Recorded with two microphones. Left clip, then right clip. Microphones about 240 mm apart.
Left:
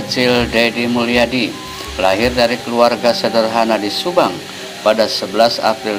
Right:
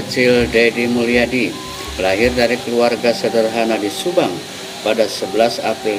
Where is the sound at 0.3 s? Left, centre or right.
Centre.